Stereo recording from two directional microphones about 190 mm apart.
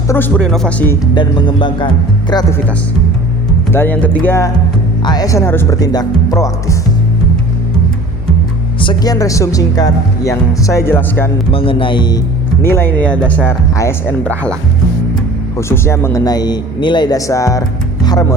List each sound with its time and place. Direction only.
0.1 s speech: 10° left (ahead or behind)
1.1 s speech: 25° left (ahead or behind)
3.7 s speech: 10° left (ahead or behind)
8.8 s speech: 25° left (ahead or behind)
11.5 s speech: 30° left (ahead or behind)
12.6 s speech: 10° left (ahead or behind)
15.5 s speech: 15° left (ahead or behind)